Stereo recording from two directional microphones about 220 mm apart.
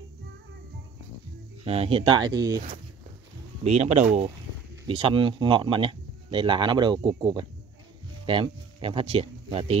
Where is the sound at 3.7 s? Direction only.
30° right (ahead or behind).